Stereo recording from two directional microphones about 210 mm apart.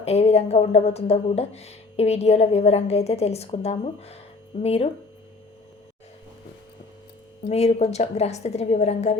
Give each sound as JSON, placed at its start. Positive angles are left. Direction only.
{"t": 0.0, "sound": "a woman's voice", "side_deg": 30}
{"t": 7.4, "sound": "a woman's voice", "side_deg": 30}